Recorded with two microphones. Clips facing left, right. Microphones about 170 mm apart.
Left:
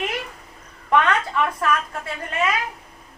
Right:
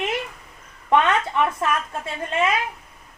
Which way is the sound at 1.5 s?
25° right (ahead or behind).